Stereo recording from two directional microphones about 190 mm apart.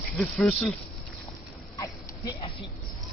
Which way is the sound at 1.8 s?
20° left (ahead or behind).